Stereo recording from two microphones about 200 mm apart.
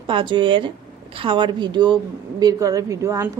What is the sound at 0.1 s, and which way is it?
A woman's voice, 25° right (ahead or behind).